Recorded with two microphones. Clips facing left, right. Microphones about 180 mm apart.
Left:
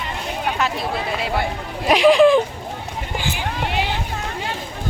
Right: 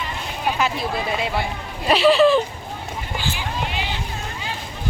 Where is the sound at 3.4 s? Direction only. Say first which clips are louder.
Left 3 dB; 60° left (ahead or behind).